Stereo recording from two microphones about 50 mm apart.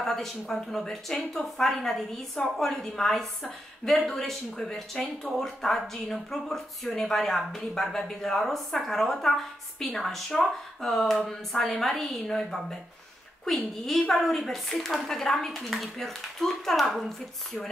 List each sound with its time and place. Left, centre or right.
0.0 s speech: centre
13.8 s speech: centre